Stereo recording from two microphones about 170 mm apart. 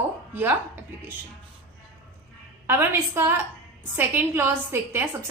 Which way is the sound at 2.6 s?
15° right (ahead or behind).